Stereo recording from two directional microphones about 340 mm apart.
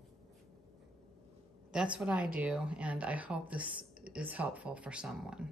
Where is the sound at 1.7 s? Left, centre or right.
Centre.